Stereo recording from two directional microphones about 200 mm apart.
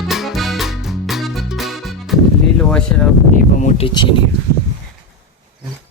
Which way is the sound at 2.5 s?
5° left (ahead or behind).